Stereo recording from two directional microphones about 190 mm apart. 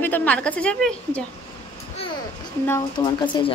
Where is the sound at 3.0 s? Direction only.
20° left (ahead or behind).